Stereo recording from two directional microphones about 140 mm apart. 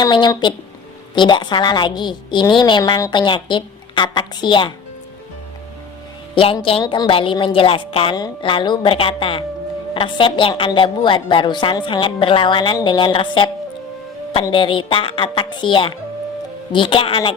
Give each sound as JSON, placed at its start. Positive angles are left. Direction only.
{"t": 0.0, "sound": "a woman's voice", "side_deg": 30}
{"t": 6.3, "sound": "a woman's voice", "side_deg": 40}
{"t": 14.5, "sound": "a woman's voice", "side_deg": 35}